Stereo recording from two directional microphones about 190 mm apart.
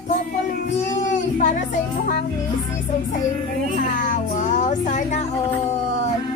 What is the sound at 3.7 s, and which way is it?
Child singing, 40° left (ahead or behind).